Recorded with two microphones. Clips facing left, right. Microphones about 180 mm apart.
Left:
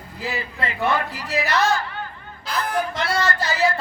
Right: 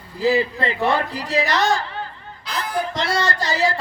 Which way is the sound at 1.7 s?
30° right (ahead or behind).